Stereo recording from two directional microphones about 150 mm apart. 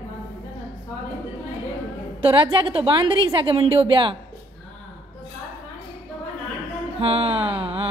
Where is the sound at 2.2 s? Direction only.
35° right (ahead or behind).